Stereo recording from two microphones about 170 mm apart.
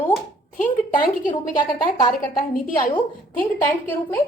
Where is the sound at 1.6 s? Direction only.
30° left (ahead or behind).